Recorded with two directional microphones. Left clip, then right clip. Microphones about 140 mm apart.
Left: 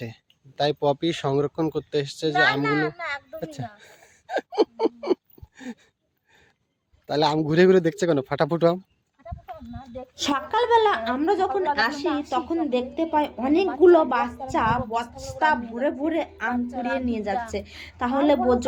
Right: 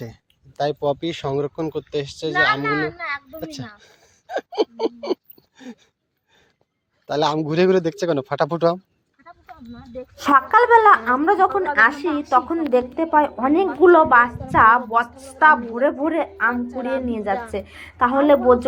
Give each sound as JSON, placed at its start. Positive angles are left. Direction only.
{"t": 0.0, "sound": "speech", "side_deg": 25}
{"t": 3.4, "sound": "a sound", "side_deg": 35}
{"t": 7.1, "sound": "a man's voice", "side_deg": 25}
{"t": 10.2, "sound": "a woman's voice", "side_deg": 10}
{"t": 10.5, "sound": "a woman's voice", "side_deg": 0}
{"t": 16.5, "sound": "a woman's voice", "side_deg": 20}